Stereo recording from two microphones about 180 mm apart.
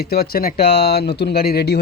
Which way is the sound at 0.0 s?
60° left (ahead or behind).